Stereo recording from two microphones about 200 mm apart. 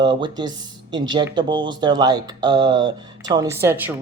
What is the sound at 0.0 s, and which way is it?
Speech, 25° right (ahead or behind).